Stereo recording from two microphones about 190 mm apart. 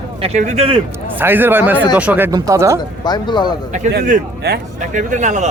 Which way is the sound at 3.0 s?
25° left (ahead or behind).